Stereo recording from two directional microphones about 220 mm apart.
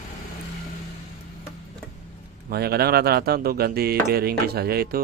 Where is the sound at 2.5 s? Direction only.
45° right (ahead or behind).